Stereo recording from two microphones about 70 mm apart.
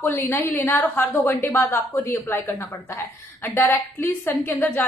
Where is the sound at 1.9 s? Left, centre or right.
Left.